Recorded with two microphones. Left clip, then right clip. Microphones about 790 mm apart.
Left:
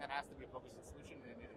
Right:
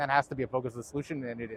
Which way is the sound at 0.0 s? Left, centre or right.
Right.